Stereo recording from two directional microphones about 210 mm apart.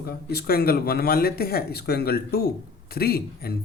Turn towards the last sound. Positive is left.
turn(degrees=45)  # may be behind; listen again after turning